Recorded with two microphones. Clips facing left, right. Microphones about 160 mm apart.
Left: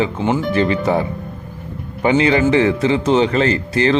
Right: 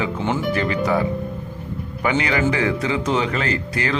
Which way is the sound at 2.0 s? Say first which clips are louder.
Left 6 dB; 25° left (ahead or behind).